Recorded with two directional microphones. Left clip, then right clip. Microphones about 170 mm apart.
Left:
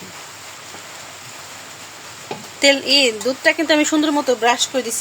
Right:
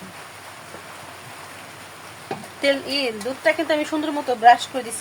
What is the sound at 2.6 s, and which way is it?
Speech, 40° left (ahead or behind).